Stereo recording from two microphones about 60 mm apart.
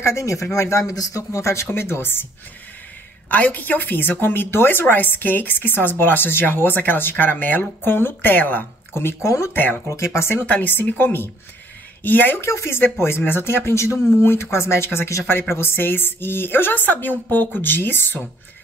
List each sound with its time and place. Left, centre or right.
0.0 s speech: left
0.9 s speech: left
3.3 s a woman's voice: left
9.2 s speech: left
9.5 s a woman's voice: left
9.8 s speech: left
10.4 s a woman's voice: left
12.4 s a woman's voice: left